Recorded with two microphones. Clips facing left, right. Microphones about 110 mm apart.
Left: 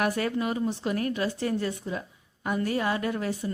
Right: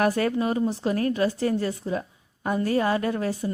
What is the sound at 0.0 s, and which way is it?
A woman's voice, 40° right (ahead or behind).